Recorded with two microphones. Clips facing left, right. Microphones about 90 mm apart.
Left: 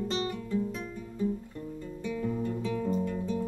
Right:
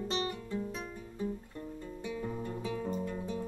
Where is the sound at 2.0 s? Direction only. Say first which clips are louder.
Left 6 dB; 25° right (ahead or behind).